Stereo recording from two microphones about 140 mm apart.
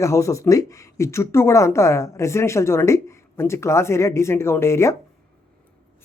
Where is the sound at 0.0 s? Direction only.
20° left (ahead or behind).